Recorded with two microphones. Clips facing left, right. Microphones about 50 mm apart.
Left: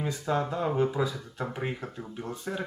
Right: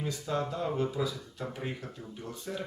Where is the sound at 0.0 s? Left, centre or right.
Left.